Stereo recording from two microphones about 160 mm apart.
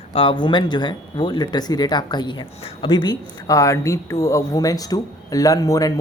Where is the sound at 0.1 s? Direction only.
30° left (ahead or behind).